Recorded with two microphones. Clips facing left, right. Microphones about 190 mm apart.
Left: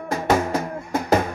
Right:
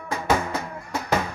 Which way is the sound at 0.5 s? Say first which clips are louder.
Left 6 dB; 50° left (ahead or behind).